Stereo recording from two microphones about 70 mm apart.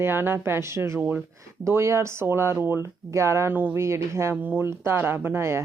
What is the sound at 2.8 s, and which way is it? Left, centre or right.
Speech, right.